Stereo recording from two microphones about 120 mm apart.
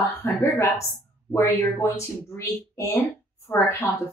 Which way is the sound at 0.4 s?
25° left (ahead or behind).